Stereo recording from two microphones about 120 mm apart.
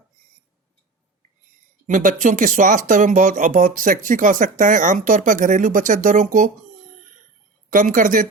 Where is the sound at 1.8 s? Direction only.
90° right.